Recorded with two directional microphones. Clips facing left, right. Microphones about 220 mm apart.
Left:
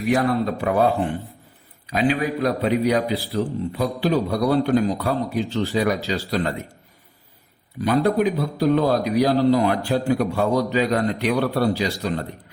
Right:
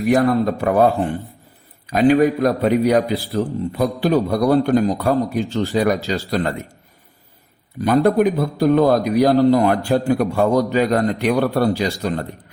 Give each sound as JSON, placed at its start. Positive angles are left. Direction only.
{"t": 0.1, "sound": "a man's voice", "side_deg": -45}
{"t": 1.9, "sound": "a man's voice", "side_deg": -45}
{"t": 7.8, "sound": "a man's voice", "side_deg": -50}